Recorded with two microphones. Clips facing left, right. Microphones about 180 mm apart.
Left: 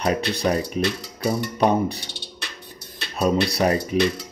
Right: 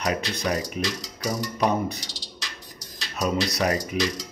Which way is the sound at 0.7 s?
60° left (ahead or behind).